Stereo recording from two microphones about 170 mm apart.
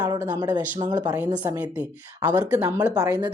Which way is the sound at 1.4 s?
10° right (ahead or behind).